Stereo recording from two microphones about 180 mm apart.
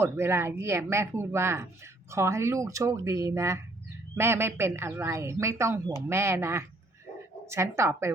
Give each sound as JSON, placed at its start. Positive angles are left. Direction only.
{"t": 0.0, "sound": "a woman's voice", "side_deg": -15}